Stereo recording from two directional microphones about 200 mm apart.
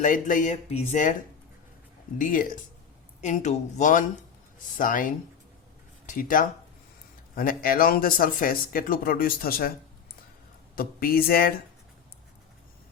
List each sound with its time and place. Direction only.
0.0 s speech: 40° left (ahead or behind)
2.1 s speech: 45° left (ahead or behind)
10.8 s speech: 45° left (ahead or behind)